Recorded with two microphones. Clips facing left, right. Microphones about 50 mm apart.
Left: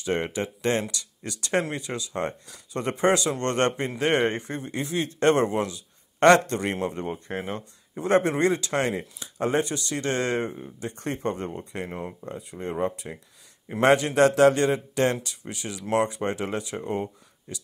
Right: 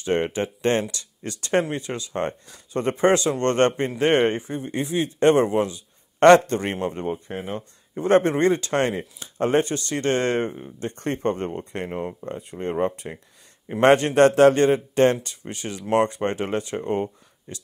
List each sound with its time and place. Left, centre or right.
0.0 s speech: right
4.6 s a man's voice: right
11.9 s a man's voice: right
12.2 s speech: right